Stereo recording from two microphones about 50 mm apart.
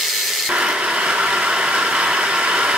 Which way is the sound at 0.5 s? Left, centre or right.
Centre.